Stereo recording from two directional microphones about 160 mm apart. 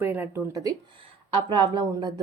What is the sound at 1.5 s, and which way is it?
Speech, 30° right (ahead or behind).